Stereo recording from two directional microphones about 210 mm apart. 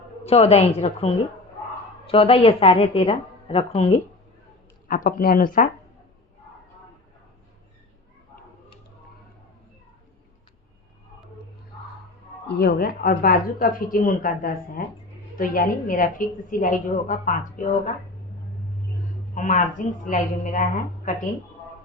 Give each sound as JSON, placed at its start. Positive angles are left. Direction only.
{"t": 0.3, "sound": "a woman's voice", "side_deg": 30}
{"t": 4.9, "sound": "speech", "side_deg": 40}
{"t": 12.5, "sound": "a woman's voice", "side_deg": 50}
{"t": 19.3, "sound": "a woman's voice", "side_deg": 35}